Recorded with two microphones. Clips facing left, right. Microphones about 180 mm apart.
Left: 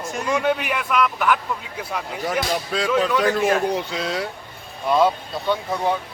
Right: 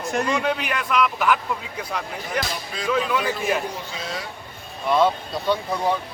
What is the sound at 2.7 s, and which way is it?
Speech, 90° left.